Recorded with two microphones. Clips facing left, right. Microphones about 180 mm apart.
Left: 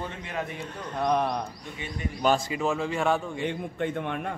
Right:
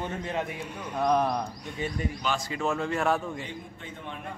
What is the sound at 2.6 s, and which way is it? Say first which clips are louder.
Speech: even; centre (ahead or behind).